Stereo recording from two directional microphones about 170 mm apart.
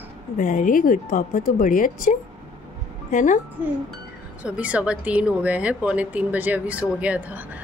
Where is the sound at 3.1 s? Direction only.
50° left (ahead or behind).